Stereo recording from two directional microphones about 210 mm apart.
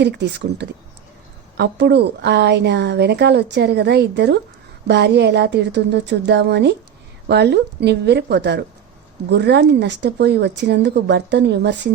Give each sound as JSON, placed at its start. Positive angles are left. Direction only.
{"t": 0.0, "sound": "a woman's voice", "side_deg": -55}